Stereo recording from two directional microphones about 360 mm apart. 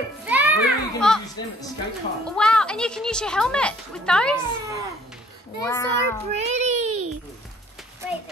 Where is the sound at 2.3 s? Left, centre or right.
Centre.